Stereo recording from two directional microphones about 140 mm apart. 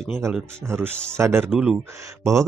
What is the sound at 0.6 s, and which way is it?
Speech, 15° right (ahead or behind).